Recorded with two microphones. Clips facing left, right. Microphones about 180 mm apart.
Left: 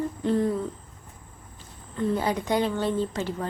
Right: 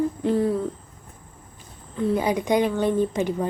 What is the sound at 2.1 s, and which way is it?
Speech, 15° right (ahead or behind).